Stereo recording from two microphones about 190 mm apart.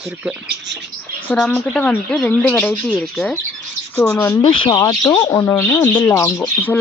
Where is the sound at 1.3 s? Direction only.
10° left (ahead or behind).